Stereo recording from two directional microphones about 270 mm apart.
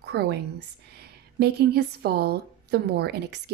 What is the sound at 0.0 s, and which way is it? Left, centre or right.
A woman's voice, right.